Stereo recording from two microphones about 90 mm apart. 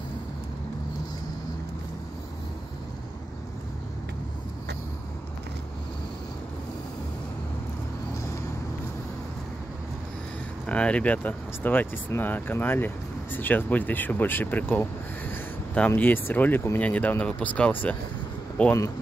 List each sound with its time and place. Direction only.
10.7 s speech: 15° left (ahead or behind)
15.9 s speech: 25° left (ahead or behind)